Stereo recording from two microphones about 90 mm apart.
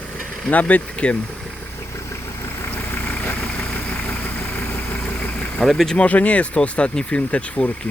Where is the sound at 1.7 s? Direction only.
30° left (ahead or behind).